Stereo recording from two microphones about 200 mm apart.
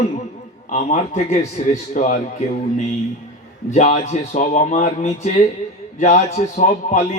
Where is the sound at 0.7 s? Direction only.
35° left (ahead or behind).